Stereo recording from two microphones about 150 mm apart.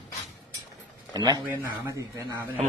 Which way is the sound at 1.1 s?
25° right (ahead or behind).